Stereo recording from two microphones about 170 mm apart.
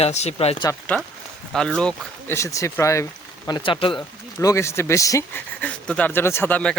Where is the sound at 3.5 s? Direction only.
30° left (ahead or behind).